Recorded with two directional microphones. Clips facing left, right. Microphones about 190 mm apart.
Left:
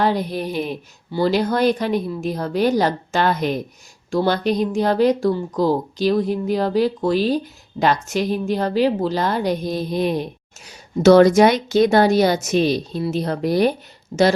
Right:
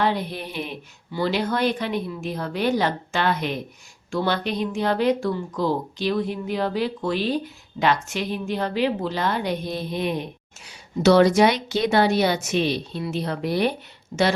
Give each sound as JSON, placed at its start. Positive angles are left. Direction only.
{"t": 0.0, "sound": "speech", "side_deg": 40}